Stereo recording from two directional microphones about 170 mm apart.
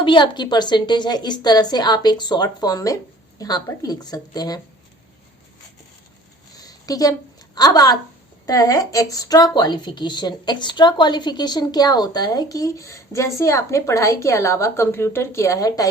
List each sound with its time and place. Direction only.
0.0 s speech: 30° left (ahead or behind)
6.6 s a sound: 20° left (ahead or behind)
8.4 s speech: 20° left (ahead or behind)